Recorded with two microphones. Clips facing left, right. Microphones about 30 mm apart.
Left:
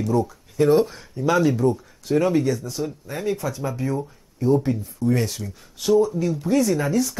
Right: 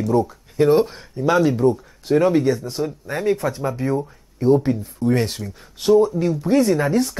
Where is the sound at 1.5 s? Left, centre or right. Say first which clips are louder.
Right 3 dB; right.